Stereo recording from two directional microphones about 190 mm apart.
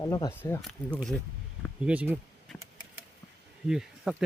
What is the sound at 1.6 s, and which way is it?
Speech, 5° right (ahead or behind).